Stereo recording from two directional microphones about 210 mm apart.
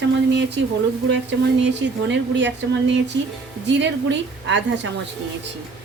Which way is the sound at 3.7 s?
60° right (ahead or behind).